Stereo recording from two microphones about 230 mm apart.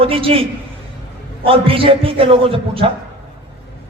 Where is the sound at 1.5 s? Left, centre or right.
Right.